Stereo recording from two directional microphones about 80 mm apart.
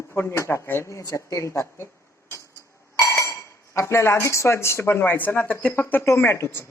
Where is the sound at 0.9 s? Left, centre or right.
Left.